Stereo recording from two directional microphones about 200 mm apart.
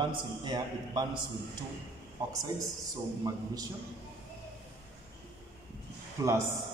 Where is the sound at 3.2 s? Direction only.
20° right (ahead or behind).